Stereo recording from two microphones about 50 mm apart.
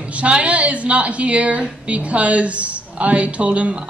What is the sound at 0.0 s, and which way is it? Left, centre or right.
A woman's voice, right.